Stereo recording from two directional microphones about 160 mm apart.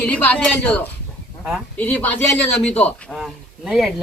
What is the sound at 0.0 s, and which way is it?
Speech, 10° left (ahead or behind).